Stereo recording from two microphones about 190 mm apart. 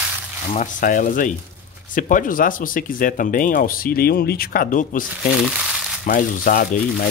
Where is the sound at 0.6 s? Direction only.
45° left (ahead or behind).